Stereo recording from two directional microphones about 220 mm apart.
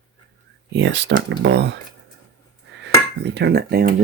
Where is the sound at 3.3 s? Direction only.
50° right (ahead or behind).